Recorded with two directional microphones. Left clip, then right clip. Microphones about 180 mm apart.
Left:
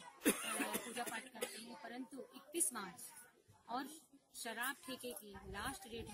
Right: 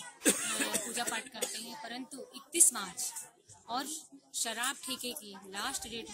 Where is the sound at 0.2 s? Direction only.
35° left (ahead or behind).